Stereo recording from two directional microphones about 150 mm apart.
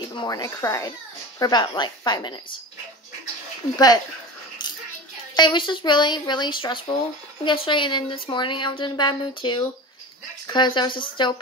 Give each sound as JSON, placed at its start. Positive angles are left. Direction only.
{"t": 0.1, "sound": "a woman's voice", "side_deg": 30}
{"t": 3.7, "sound": "a woman's voice", "side_deg": 25}
{"t": 5.3, "sound": "speech", "side_deg": 30}